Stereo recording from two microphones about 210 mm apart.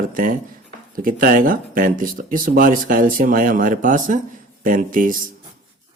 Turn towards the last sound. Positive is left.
turn(degrees=-40)  # may be behind; listen again after turning